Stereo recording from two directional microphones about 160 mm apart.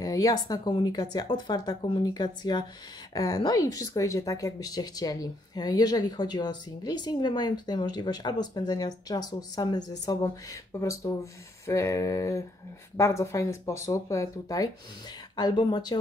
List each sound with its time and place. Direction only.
0.0 s speech: 20° left (ahead or behind)